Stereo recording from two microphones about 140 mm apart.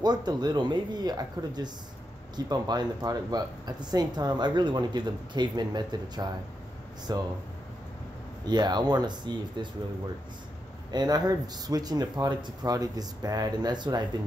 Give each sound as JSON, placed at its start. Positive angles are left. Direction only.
{"t": 0.0, "sound": "speech", "side_deg": -30}
{"t": 8.5, "sound": "speech", "side_deg": -30}
{"t": 10.9, "sound": "speech", "side_deg": -30}